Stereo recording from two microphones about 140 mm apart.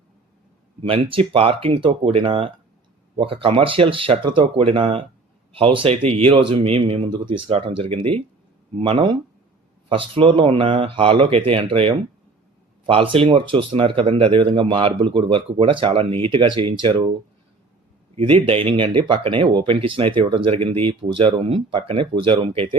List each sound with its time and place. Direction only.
0.8 s speech: 40° right (ahead or behind)
18.2 s speech: 40° right (ahead or behind)